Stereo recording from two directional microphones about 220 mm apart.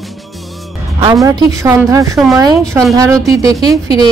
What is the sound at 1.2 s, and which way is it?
Speech, 15° right (ahead or behind).